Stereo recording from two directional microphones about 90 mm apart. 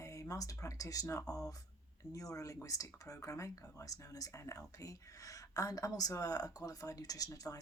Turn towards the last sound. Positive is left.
turn(degrees=40)  # may be behind; listen again after turning